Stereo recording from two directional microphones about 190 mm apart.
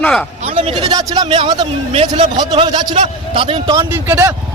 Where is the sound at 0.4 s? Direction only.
30° right (ahead or behind).